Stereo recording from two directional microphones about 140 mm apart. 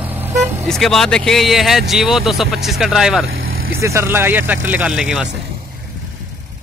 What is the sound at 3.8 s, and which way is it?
Speech, 20° right (ahead or behind).